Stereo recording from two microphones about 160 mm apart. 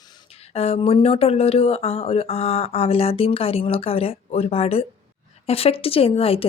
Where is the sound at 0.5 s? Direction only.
40° left (ahead or behind).